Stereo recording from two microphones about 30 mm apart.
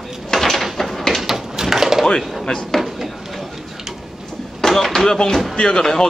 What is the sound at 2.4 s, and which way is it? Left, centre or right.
Drawer open or close, left.